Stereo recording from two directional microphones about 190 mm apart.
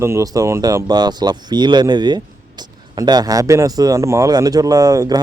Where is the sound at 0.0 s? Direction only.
15° right (ahead or behind).